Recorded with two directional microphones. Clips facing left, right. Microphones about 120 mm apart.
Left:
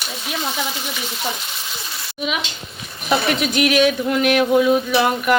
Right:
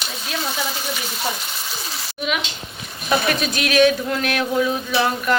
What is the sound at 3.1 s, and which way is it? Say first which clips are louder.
Speech: left 1 dB; 20° left (ahead or behind).